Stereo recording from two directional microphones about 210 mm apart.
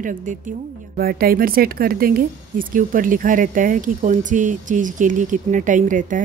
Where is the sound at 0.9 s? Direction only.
45° right (ahead or behind).